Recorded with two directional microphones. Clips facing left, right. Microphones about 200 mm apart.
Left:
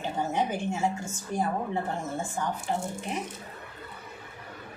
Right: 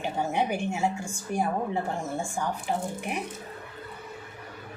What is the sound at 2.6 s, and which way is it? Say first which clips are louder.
Speech: right 1 dB; 15° right (ahead or behind).